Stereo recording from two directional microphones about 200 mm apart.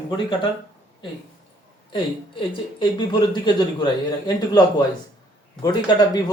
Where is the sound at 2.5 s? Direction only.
25° left (ahead or behind).